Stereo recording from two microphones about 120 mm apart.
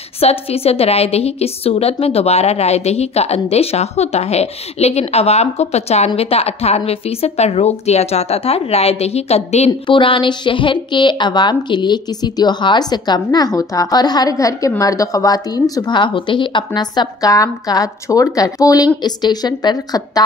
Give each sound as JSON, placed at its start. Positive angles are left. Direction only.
{"t": 0.2, "sound": "a woman's voice", "side_deg": 55}
{"t": 9.7, "sound": "a woman's voice", "side_deg": 45}